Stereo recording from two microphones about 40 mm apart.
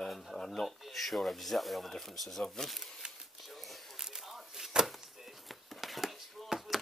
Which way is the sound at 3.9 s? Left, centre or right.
Centre.